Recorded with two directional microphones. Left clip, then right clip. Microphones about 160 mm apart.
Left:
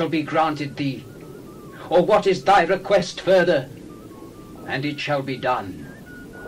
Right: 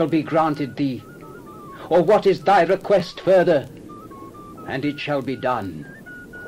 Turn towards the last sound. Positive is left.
turn(degrees=35)  # may be behind; listen again after turning